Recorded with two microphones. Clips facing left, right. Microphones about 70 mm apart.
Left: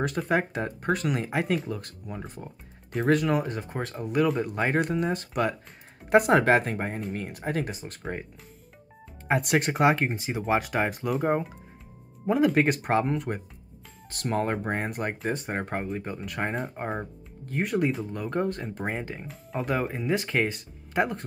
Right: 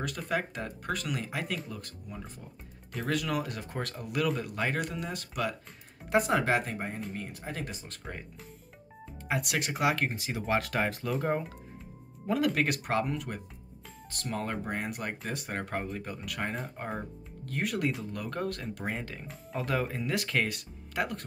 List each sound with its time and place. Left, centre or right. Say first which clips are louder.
0.3 s speech: left 4 dB; left
3.2 s speech: left 6 dB; left
7.6 s speech: left 5 dB; left
9.3 s speech: left 7 dB; left
19.6 s speech: left 3 dB; centre